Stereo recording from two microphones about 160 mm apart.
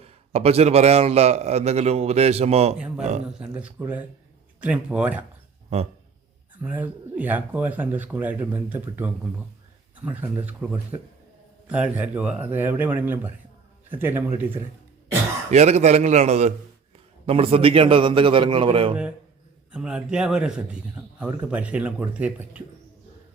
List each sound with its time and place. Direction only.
0.0 s a man's voice: 40° right (ahead or behind)
2.7 s speech: 5° right (ahead or behind)
3.0 s a man's voice: 45° right (ahead or behind)
3.5 s speech: 10° right (ahead or behind)
6.6 s speech: 10° right (ahead or behind)
15.4 s a man's voice: 45° right (ahead or behind)
19.7 s speech: 5° right (ahead or behind)